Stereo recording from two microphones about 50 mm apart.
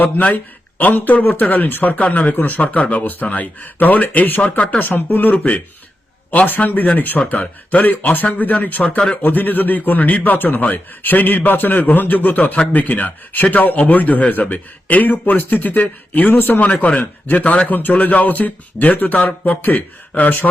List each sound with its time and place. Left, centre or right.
0.0 s a man's voice: left
4.8 s a man's voice: left
5.4 s a man's voice: left
8.8 s speech: left
9.2 s a man's voice: left